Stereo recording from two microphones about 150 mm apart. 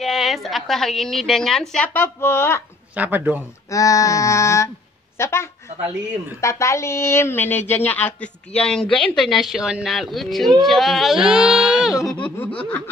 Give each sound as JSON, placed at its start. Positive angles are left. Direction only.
{"t": 0.0, "sound": "a woman's voice", "side_deg": 0}
{"t": 2.1, "sound": "speech", "side_deg": 15}
{"t": 3.0, "sound": "speech", "side_deg": -10}
{"t": 3.7, "sound": "female singing", "side_deg": 20}
{"t": 5.1, "sound": "a woman's voice", "side_deg": 15}
{"t": 12.2, "sound": "laughter", "side_deg": 10}